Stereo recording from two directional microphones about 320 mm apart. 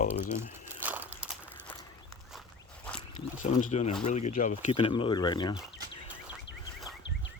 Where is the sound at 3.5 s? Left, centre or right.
Left.